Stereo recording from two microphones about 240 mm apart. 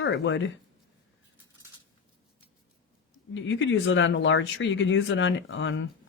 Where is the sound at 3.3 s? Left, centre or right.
Left.